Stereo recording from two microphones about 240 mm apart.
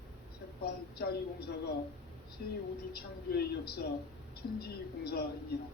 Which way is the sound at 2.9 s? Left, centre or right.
Left.